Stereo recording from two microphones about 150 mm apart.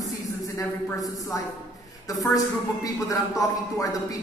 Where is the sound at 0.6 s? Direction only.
25° left (ahead or behind).